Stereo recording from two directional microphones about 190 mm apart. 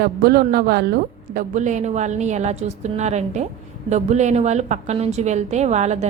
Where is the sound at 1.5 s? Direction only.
40° right (ahead or behind).